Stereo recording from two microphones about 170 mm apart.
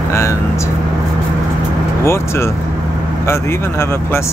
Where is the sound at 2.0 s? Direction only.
15° left (ahead or behind).